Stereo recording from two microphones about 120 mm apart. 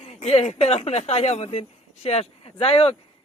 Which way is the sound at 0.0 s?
65° left (ahead or behind).